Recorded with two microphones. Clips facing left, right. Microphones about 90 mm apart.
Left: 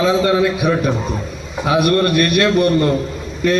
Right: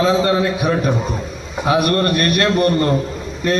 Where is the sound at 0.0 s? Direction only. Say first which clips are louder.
Left 1 dB; 35° right (ahead or behind).